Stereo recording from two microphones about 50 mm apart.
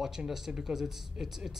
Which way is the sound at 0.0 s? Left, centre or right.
Centre.